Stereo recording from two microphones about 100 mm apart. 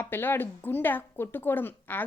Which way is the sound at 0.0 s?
20° left (ahead or behind).